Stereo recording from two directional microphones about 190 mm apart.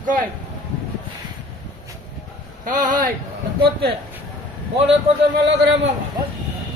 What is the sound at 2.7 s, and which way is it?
Speech, 45° right (ahead or behind).